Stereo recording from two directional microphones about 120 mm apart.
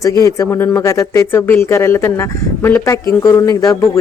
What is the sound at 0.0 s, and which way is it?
Speech, 30° left (ahead or behind).